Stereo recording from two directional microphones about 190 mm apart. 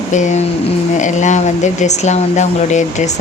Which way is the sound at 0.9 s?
40° left (ahead or behind).